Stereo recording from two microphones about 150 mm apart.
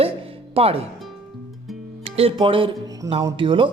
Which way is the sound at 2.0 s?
40° right (ahead or behind).